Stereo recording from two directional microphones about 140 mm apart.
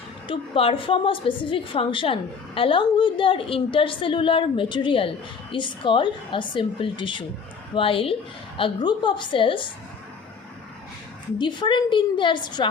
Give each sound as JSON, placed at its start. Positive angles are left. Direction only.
{"t": 0.3, "sound": "a woman's voice", "side_deg": 40}
{"t": 11.3, "sound": "a woman's voice", "side_deg": 35}